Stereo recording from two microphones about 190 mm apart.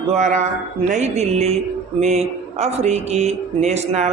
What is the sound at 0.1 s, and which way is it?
Speech, 40° right (ahead or behind).